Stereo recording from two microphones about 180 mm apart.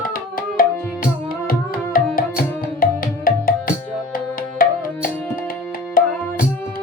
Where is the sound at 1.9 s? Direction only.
50° left (ahead or behind).